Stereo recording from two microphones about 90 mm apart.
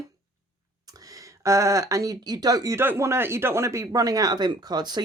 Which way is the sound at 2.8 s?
30° right (ahead or behind).